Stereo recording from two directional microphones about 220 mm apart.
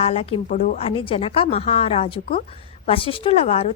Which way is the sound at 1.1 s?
25° left (ahead or behind).